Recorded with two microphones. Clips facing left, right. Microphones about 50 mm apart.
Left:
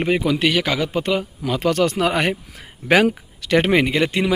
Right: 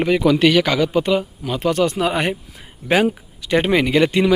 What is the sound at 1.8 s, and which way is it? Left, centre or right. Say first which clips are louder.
Speech: right 1 dB; left.